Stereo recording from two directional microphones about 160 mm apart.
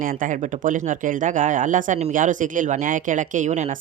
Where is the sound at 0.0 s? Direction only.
60° right (ahead or behind).